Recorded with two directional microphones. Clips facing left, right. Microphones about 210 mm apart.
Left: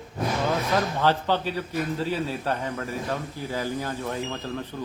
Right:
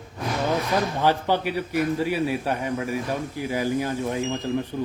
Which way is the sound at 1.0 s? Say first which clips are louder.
Right 2 dB; 15° right (ahead or behind).